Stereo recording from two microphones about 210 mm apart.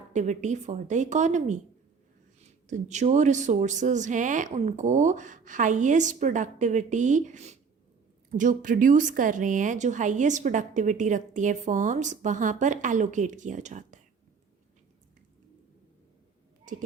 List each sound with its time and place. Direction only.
0.1 s a woman's voice: 35° right (ahead or behind)
2.6 s a woman's voice: 35° right (ahead or behind)
16.7 s speech: 40° right (ahead or behind)